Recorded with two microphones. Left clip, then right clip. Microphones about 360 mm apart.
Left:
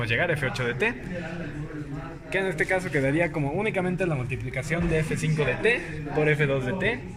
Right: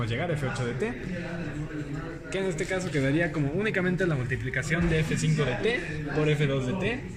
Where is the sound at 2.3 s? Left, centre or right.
Left.